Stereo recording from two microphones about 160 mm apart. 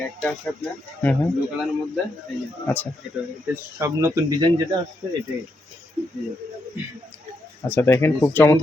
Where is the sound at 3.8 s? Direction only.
15° right (ahead or behind).